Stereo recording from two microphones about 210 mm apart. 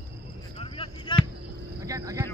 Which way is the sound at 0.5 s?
25° left (ahead or behind).